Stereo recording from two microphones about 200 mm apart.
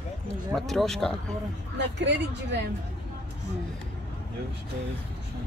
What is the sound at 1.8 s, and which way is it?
Speech, 60° right (ahead or behind).